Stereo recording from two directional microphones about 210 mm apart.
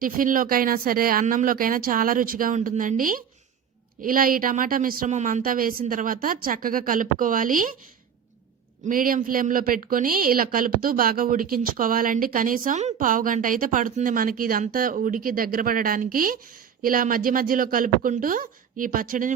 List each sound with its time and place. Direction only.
0.0 s a woman's voice: 40° right (ahead or behind)
8.9 s a woman's voice: 40° right (ahead or behind)